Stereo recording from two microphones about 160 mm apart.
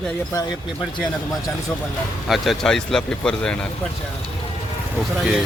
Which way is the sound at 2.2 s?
Centre (ahead or behind).